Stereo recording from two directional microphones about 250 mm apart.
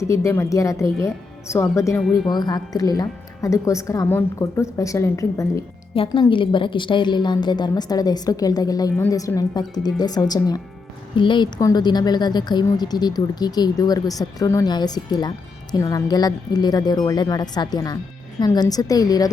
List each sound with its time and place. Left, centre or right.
0.0 s a woman's voice: centre